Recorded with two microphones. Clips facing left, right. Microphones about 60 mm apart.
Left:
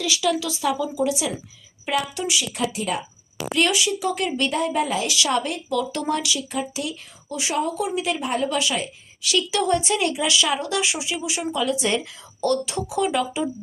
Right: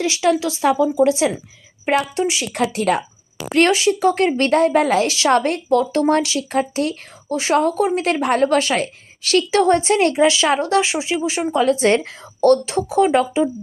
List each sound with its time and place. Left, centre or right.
0.0 s speech: right
2.5 s speech: right
3.5 s a woman's voice: right
5.0 s speech: right
5.3 s a woman's voice: right
5.8 s speech: right
6.5 s a woman's voice: right